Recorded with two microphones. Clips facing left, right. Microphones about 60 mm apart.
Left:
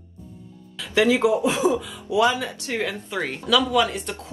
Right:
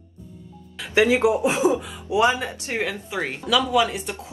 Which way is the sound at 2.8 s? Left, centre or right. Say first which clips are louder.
Right 1 dB; centre.